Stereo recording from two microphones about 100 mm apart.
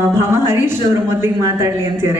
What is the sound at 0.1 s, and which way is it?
A man's voice, 25° right (ahead or behind).